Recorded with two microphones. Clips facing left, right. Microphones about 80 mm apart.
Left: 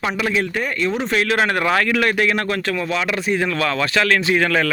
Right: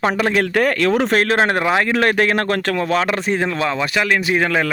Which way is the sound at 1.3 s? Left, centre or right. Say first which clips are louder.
Right 2 dB; right.